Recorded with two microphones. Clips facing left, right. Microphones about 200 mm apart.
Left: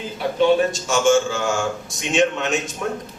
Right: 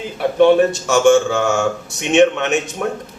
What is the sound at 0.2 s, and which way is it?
A man's voice, 60° right (ahead or behind).